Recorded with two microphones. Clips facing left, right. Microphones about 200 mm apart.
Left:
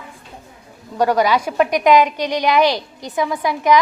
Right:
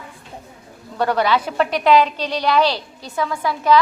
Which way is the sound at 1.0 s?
10° left (ahead or behind).